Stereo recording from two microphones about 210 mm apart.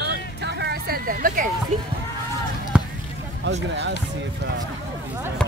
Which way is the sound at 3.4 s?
55° right (ahead or behind).